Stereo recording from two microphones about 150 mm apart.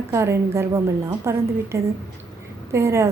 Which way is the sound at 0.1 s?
20° right (ahead or behind).